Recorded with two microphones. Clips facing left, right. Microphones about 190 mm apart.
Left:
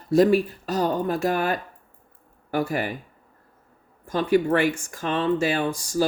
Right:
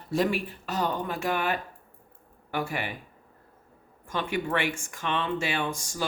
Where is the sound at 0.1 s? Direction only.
40° left (ahead or behind).